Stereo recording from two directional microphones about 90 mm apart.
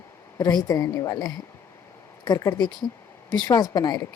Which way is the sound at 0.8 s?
35° left (ahead or behind).